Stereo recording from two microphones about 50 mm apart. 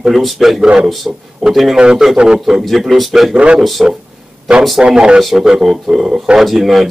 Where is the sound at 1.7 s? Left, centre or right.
Centre.